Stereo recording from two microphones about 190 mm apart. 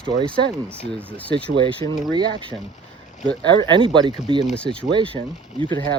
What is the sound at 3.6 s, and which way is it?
Speech, 25° right (ahead or behind).